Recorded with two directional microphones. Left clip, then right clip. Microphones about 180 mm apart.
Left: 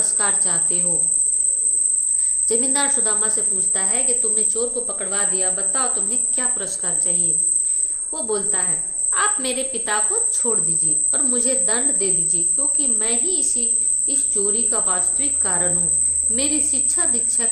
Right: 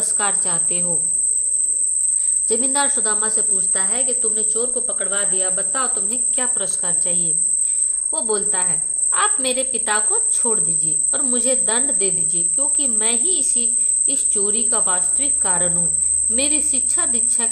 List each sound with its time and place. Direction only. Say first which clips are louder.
0.0 s a woman's voice: even; 30° right (ahead or behind)
2.5 s a woman's voice: right 1 dB; 20° right (ahead or behind)